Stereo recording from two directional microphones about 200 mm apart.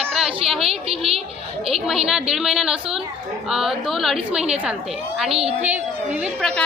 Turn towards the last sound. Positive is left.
turn(degrees=5)  # may be behind; listen again after turning